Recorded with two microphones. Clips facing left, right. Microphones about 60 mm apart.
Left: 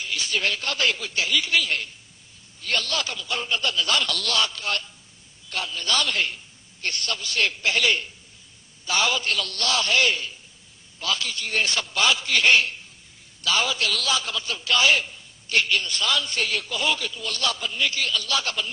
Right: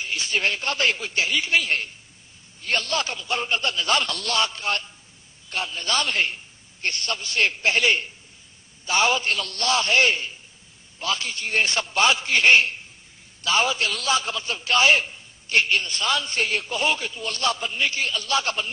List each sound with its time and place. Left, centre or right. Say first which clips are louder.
0.0 s a man's voice: right 1 dB; right